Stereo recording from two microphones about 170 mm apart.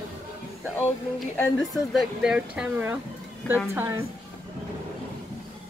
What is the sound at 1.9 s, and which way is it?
Speech, 5° right (ahead or behind).